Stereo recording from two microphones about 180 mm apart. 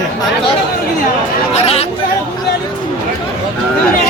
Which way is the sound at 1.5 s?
35° left (ahead or behind).